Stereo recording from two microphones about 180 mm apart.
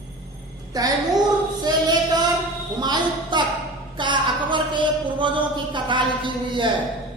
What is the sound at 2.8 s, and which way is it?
Speech, 25° right (ahead or behind).